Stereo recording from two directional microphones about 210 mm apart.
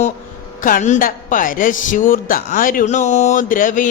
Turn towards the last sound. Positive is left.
turn(degrees=40)  # may be behind; listen again after turning